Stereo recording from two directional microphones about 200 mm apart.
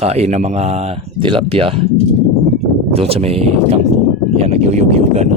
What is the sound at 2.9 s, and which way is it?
Speech, 30° right (ahead or behind).